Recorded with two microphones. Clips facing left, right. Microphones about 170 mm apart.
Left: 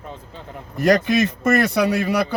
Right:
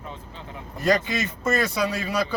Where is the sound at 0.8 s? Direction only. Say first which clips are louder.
Left 6 dB; 75° left (ahead or behind).